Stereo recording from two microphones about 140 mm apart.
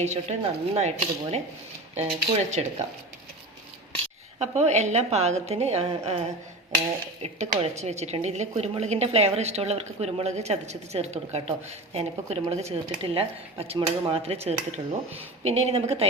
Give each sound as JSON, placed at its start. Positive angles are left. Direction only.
{"t": 0.0, "sound": "a woman's voice", "side_deg": -50}
{"t": 4.4, "sound": "a woman's voice", "side_deg": -50}